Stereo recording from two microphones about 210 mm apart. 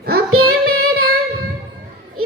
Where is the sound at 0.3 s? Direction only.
90° right.